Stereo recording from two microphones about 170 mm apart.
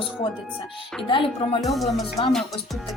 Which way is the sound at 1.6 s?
Centre (ahead or behind).